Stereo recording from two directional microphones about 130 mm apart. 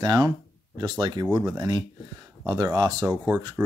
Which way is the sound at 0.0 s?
30° right (ahead or behind).